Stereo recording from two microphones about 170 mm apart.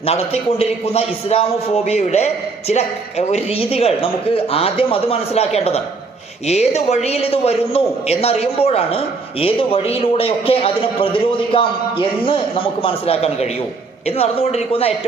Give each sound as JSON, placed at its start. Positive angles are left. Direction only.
{"t": 0.6, "sound": "a man's voice", "side_deg": 35}